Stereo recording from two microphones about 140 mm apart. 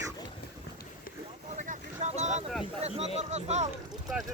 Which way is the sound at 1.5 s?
65° right (ahead or behind).